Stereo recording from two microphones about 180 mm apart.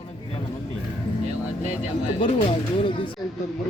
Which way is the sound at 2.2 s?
35° left (ahead or behind).